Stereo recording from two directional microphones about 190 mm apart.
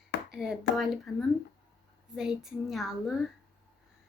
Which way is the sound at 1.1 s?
Centre (ahead or behind).